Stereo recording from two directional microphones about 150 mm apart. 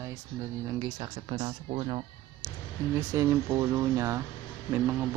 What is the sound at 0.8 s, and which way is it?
Speech, 30° right (ahead or behind).